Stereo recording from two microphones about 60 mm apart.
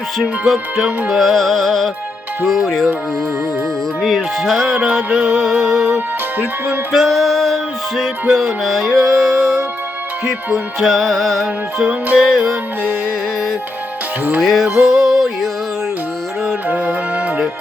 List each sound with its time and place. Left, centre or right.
0.2 s music: centre
4.0 s music: centre
14.4 s music: centre
16.6 s music: right